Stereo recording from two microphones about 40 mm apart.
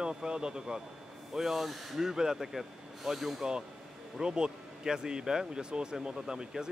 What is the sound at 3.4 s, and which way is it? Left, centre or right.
Speech, right.